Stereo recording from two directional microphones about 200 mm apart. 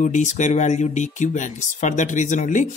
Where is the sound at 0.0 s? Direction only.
35° left (ahead or behind).